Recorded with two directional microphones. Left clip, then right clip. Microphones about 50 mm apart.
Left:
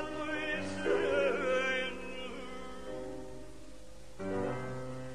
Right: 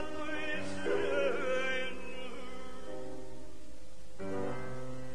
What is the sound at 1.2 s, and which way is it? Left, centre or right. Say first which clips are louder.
Chant: left 2 dB; left.